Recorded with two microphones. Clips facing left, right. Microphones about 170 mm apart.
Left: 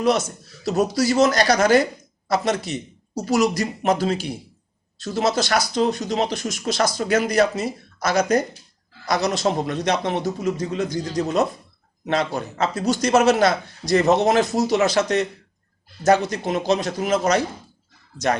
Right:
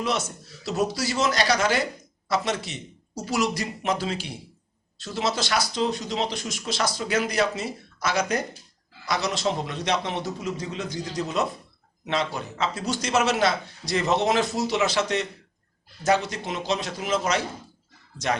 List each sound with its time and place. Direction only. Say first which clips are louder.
0.0 s a man's voice: left 7 dB; 40° left (ahead or behind)